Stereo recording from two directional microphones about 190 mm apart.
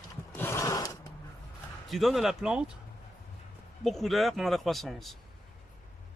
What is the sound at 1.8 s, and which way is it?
Speech, centre (ahead or behind).